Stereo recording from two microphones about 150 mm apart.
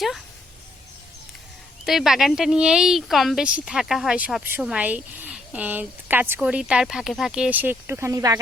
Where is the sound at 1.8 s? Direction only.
Centre (ahead or behind).